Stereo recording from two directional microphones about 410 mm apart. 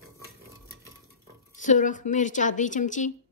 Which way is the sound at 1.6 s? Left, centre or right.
Centre.